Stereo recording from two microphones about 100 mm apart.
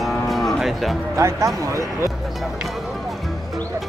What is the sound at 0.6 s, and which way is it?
Speech, centre (ahead or behind).